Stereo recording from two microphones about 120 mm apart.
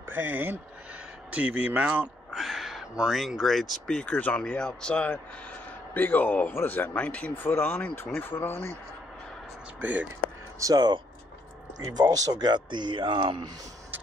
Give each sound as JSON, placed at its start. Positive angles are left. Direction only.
{"t": 0.1, "sound": "speech", "side_deg": -15}
{"t": 2.3, "sound": "speech", "side_deg": 0}
{"t": 9.8, "sound": "speech", "side_deg": -15}
{"t": 10.6, "sound": "speech", "side_deg": -35}
{"t": 12.0, "sound": "speech", "side_deg": -30}